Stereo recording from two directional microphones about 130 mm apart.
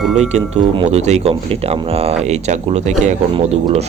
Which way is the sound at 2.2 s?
60° right (ahead or behind).